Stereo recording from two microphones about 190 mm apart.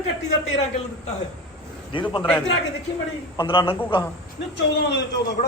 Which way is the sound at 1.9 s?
25° left (ahead or behind).